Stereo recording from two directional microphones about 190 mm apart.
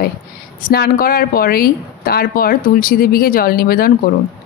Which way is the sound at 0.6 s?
55° left (ahead or behind).